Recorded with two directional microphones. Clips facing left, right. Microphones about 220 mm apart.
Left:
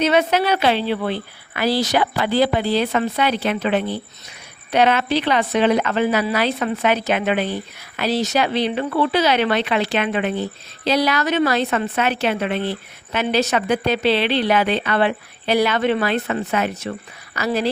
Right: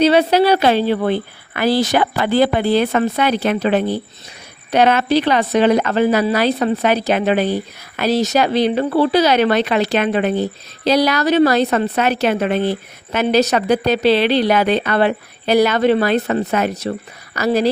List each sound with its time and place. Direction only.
0.0 s a woman's voice: 35° right (ahead or behind)